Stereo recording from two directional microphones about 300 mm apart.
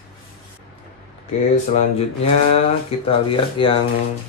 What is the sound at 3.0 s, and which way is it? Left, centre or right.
Speech, centre.